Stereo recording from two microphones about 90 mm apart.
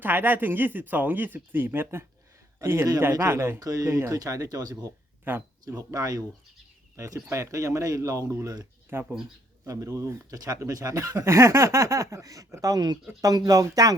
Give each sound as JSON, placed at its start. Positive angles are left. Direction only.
{"t": 0.0, "sound": "a man's voice", "side_deg": -20}
{"t": 5.3, "sound": "speech", "side_deg": -20}
{"t": 5.6, "sound": "speech", "side_deg": -40}
{"t": 8.9, "sound": "speech", "side_deg": -25}
{"t": 9.6, "sound": "speech", "side_deg": -35}